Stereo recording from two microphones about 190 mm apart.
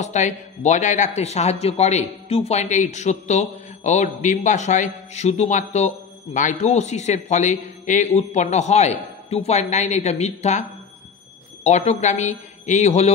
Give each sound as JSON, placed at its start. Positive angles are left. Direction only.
{"t": 0.0, "sound": "speech", "side_deg": 40}
{"t": 11.6, "sound": "speech", "side_deg": 35}